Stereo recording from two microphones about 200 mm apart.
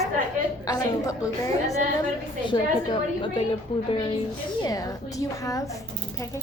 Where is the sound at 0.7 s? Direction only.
15° left (ahead or behind).